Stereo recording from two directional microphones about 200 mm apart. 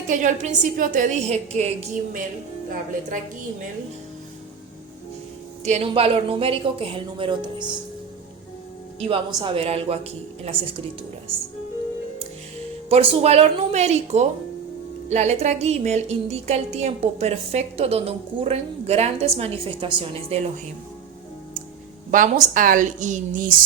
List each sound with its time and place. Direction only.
0.1 s a woman's voice: 40° right (ahead or behind)
5.6 s speech: 30° right (ahead or behind)
9.0 s speech: 25° right (ahead or behind)
12.9 s a woman's voice: 30° right (ahead or behind)
22.1 s a woman's voice: 40° right (ahead or behind)